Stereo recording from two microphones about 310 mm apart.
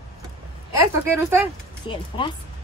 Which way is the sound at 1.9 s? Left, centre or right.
Centre.